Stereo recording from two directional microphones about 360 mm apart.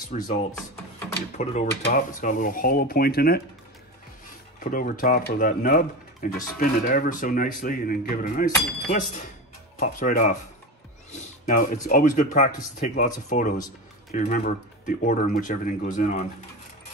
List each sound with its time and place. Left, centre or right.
0.1 s speech: centre
4.6 s speech: left
9.8 s speech: left